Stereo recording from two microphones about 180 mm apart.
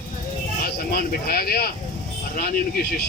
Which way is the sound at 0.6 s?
60° left (ahead or behind).